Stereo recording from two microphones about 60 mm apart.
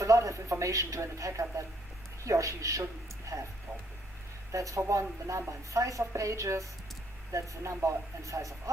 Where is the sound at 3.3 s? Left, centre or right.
Right.